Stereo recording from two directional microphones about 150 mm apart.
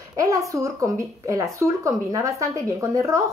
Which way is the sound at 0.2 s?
20° right (ahead or behind).